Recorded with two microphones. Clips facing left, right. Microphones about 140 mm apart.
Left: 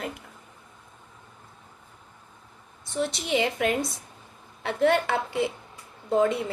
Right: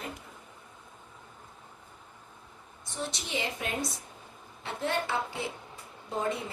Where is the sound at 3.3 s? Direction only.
75° left (ahead or behind).